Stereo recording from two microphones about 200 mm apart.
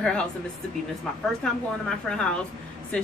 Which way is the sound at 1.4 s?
5° left (ahead or behind).